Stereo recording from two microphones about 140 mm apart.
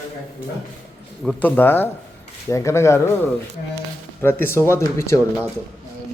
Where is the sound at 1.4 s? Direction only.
15° left (ahead or behind).